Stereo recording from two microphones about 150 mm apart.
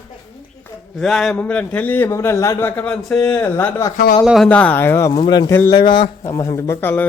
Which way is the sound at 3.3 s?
15° left (ahead or behind).